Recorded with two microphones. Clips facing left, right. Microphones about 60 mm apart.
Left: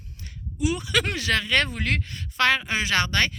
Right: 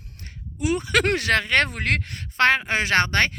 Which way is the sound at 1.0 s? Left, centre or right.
Right.